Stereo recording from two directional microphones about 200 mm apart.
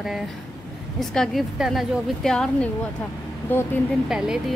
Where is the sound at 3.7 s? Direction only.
10° left (ahead or behind).